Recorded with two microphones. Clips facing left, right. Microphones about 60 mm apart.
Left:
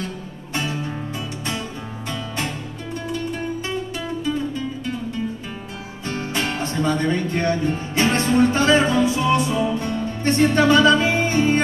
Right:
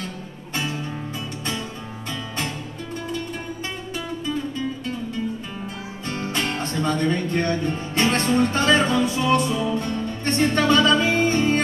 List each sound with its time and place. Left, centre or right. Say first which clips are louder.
6.3 s music: left 2 dB; centre